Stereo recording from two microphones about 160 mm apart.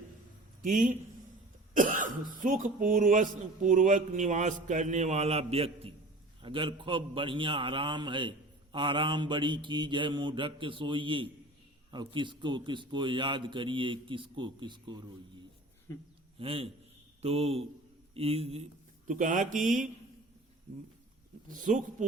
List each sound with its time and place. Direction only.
0.6 s a man's voice: 55° right (ahead or behind); by 15.1 s 30° right (ahead or behind)
16.4 s a man's voice: 35° right (ahead or behind); by 19.9 s 55° right (ahead or behind)
21.5 s speech: 55° right (ahead or behind)